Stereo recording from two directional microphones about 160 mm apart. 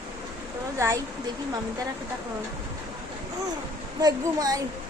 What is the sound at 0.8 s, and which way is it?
Speech, 20° right (ahead or behind).